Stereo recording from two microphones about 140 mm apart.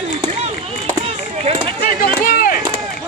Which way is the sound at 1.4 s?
40° right (ahead or behind).